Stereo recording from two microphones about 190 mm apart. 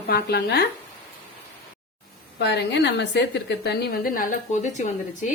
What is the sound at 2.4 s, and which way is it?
A woman's voice, 65° left (ahead or behind).